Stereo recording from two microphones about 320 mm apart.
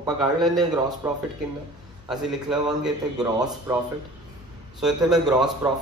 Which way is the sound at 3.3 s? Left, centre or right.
Centre.